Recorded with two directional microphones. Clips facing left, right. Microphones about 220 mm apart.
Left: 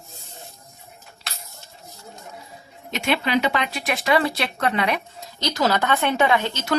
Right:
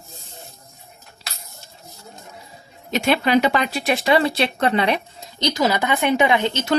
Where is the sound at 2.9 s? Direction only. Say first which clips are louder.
Right 4 dB; 45° right (ahead or behind).